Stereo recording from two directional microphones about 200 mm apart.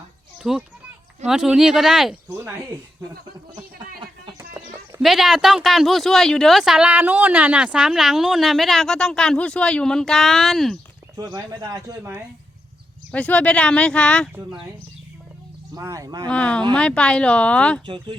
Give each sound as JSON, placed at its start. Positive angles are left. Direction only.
{"t": 0.4, "sound": "speech", "side_deg": 0}
{"t": 4.0, "sound": "a sound", "side_deg": -20}
{"t": 4.5, "sound": "speech", "side_deg": -5}
{"t": 11.2, "sound": "speech", "side_deg": -20}
{"t": 13.1, "sound": "speech", "side_deg": 5}
{"t": 15.7, "sound": "speech", "side_deg": -15}
{"t": 16.3, "sound": "speech", "side_deg": 5}
{"t": 17.8, "sound": "speech", "side_deg": -25}